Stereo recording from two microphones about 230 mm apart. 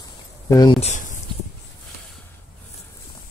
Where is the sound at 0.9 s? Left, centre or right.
Left.